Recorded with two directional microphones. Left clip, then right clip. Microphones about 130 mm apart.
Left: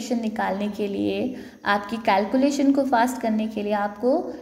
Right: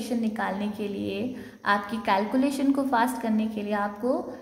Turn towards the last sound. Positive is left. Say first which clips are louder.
# left 5 dB
turn(degrees=20)  # may be behind; listen again after turning